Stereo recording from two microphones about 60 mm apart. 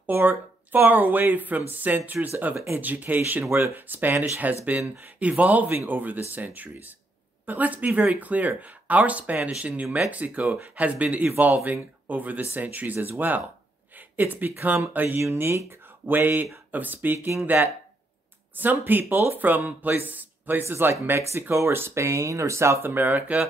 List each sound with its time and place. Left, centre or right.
0.0 s speech: right
3.4 s speech: right
3.7 s speech: right
13.9 s a sound: right
14.9 s speech: right
15.3 s speech: right
20.6 s speech: right